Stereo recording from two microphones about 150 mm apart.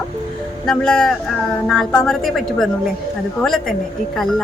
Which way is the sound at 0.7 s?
5° left (ahead or behind).